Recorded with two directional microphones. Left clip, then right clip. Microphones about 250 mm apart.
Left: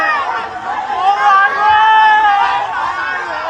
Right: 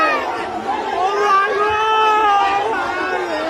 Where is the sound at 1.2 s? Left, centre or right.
Centre.